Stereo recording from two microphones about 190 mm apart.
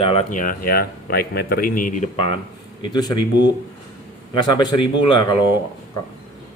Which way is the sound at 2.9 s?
20° left (ahead or behind).